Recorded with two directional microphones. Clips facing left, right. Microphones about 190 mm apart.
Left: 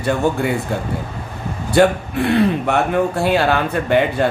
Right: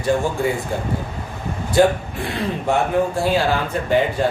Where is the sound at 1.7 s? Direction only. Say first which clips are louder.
Left 2 dB; 65° left (ahead or behind).